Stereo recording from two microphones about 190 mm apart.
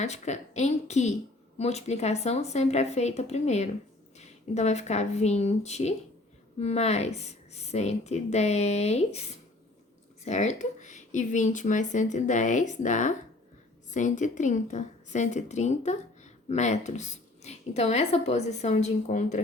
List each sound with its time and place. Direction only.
0.0 s speech: 35° left (ahead or behind)
10.2 s speech: 40° left (ahead or behind)